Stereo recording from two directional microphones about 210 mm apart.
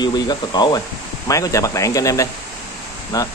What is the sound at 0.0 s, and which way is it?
Speech, 20° left (ahead or behind).